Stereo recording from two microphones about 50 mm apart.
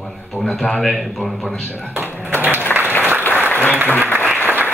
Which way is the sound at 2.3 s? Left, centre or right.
Right.